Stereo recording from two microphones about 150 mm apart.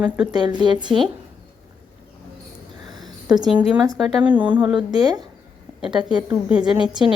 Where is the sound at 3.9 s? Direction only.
Centre (ahead or behind).